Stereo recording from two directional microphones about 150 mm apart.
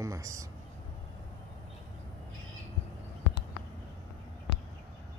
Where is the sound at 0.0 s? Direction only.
20° right (ahead or behind).